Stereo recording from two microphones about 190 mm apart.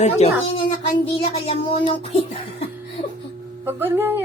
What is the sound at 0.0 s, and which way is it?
A woman's voice, 35° left (ahead or behind).